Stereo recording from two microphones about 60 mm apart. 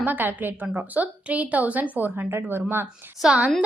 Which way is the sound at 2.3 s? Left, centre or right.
Right.